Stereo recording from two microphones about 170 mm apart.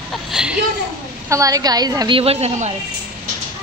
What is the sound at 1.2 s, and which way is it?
A woman's voice, 20° right (ahead or behind).